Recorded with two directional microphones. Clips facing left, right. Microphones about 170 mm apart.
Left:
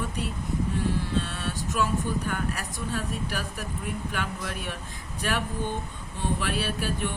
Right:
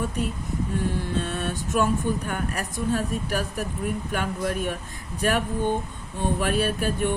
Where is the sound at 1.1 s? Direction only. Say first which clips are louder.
Right 3 dB; 50° right (ahead or behind).